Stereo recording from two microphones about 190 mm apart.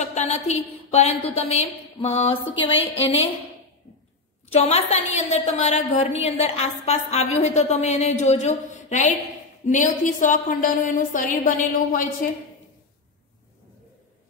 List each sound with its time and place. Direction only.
0.0 s a woman's voice: 35° left (ahead or behind)
4.5 s a woman's voice: 35° left (ahead or behind); by 12.4 s 50° left (ahead or behind)